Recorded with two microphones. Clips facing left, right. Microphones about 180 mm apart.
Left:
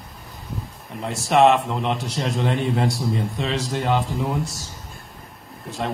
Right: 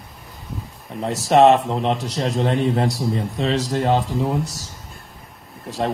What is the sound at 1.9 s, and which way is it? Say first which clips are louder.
Speech: right 2 dB; centre (ahead or behind).